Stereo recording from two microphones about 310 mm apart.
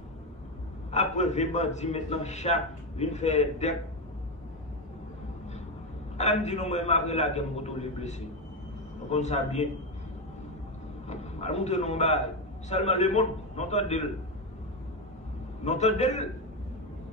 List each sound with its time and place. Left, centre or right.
0.9 s a man's voice: left
6.1 s a man's voice: left
11.1 s a man's voice: left
15.6 s a man's voice: left